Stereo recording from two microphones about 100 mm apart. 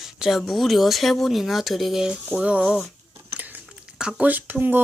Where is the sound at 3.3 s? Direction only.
20° right (ahead or behind).